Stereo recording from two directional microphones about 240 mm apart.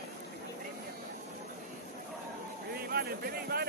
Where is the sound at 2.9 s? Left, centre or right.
Right.